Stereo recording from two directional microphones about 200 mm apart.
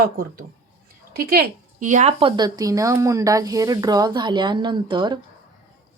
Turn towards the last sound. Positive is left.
turn(degrees=-20)  # may be behind; listen again after turning